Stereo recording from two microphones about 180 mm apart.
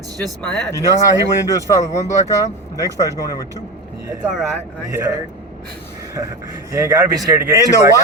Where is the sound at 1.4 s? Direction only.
15° left (ahead or behind).